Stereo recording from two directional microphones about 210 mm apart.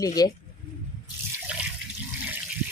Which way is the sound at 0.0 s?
15° left (ahead or behind).